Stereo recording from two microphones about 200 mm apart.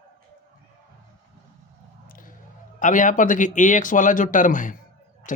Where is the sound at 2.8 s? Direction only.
40° left (ahead or behind).